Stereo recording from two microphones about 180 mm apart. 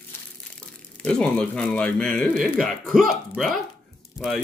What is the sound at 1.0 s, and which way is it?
Speech, 5° left (ahead or behind).